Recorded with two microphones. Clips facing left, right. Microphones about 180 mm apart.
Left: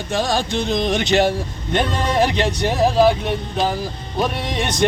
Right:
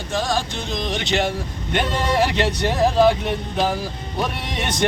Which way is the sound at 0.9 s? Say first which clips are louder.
Left 4 dB; 40° left (ahead or behind).